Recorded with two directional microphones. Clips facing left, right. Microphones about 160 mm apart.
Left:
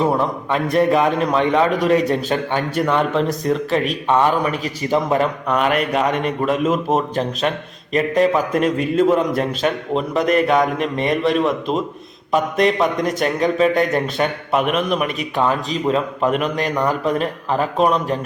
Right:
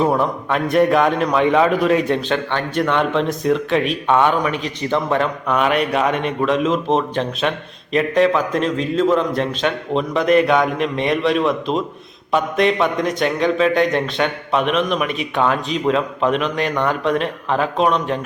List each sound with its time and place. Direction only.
0.0 s a man's voice: centre (ahead or behind)
2.3 s a man's voice: 10° left (ahead or behind)